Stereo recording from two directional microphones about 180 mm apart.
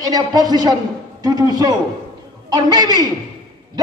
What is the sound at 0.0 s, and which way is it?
A man's voice, 20° right (ahead or behind).